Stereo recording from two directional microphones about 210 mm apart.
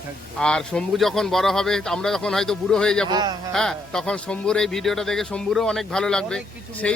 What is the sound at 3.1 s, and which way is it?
Speech, 20° right (ahead or behind).